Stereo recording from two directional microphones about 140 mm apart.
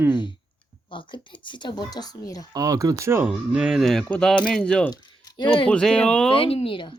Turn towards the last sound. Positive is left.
turn(degrees=40)  # may be behind; listen again after turning